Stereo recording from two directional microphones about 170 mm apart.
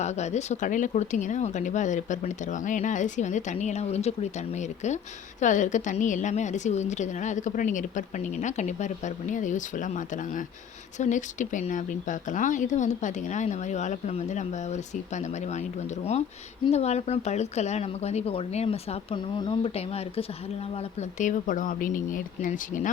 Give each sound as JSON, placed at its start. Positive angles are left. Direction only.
{"t": 0.0, "sound": "a woman's voice", "side_deg": 40}
{"t": 16.7, "sound": "a woman's voice", "side_deg": 40}